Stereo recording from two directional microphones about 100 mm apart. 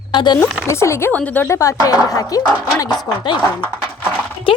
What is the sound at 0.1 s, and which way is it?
Speech, 50° left (ahead or behind).